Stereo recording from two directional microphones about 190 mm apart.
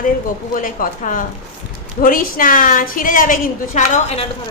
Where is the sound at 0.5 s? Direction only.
45° left (ahead or behind).